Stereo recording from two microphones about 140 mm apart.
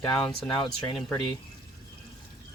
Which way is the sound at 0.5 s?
35° left (ahead or behind).